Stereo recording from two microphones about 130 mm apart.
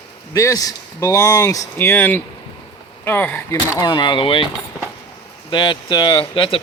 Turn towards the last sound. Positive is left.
turn(degrees=40)  # may be behind; listen again after turning